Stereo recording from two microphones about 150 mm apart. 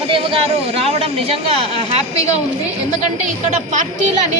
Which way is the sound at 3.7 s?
55° right (ahead or behind).